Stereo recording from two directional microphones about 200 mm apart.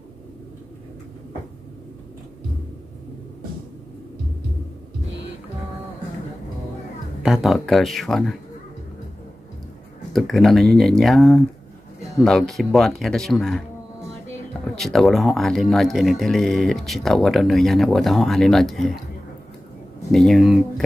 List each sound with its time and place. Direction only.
7.2 s speech: centre (ahead or behind)
10.1 s speech: centre (ahead or behind)
14.8 s speech: centre (ahead or behind)
20.1 s speech: centre (ahead or behind)